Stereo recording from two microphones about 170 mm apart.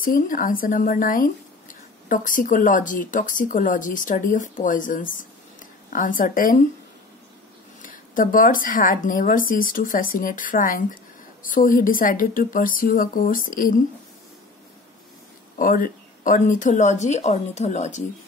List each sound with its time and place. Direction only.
0.0 s speech: 50° left (ahead or behind)
7.8 s speech: 55° left (ahead or behind)
15.5 s speech: 55° left (ahead or behind)